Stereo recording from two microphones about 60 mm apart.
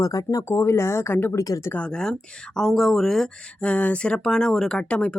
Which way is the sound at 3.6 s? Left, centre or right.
Left.